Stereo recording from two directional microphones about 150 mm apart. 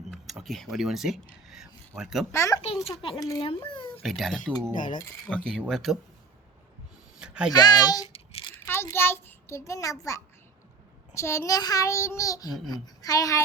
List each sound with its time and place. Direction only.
0.1 s speech: centre (ahead or behind)
1.5 s a sound: centre (ahead or behind)
2.0 s speech: centre (ahead or behind)
2.3 s a child's voice: 20° left (ahead or behind)
3.4 s a child's voice: 40° left (ahead or behind)
4.0 s speech: centre (ahead or behind)
4.7 s speech: 60° left (ahead or behind)
5.3 s speech: 5° left (ahead or behind)
7.2 s a sound: 5° right (ahead or behind)
7.5 s a child's voice: 25° left (ahead or behind)
8.0 s a sound: 40° left (ahead or behind)
8.6 s a child's voice: 15° left (ahead or behind)
11.1 s a child's voice: 20° left (ahead or behind)